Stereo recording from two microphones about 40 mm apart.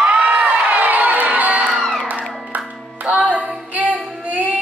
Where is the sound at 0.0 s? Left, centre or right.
Right.